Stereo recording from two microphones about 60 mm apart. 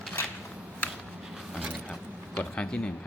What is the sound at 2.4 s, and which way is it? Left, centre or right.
Speech, centre.